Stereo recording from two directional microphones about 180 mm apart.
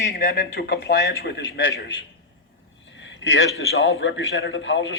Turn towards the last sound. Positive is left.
turn(degrees=90)